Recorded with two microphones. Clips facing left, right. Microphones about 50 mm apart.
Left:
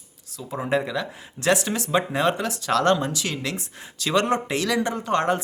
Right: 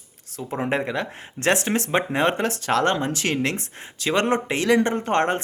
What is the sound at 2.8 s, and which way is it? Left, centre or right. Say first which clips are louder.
Speech: left 1 dB; right.